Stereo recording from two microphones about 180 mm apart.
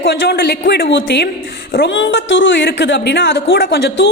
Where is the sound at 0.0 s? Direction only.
80° left.